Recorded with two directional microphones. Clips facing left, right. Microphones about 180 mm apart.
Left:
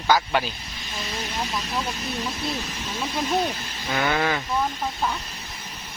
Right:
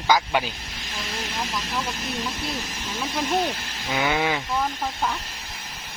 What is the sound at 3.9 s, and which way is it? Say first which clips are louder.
Speech: even; 5° right (ahead or behind).